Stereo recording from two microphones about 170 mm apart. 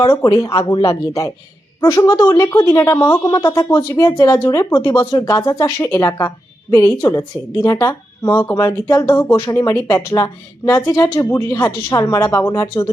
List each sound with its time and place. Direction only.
0.0 s a woman's voice: 20° left (ahead or behind)